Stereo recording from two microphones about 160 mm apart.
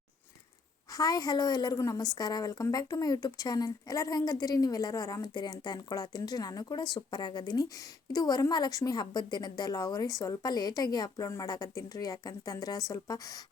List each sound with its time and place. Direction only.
0.9 s a woman's voice: 25° left (ahead or behind)